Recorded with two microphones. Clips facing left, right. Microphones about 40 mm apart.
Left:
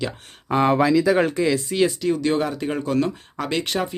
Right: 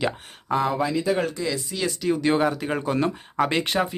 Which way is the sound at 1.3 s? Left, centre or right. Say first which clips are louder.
Left 7 dB; left.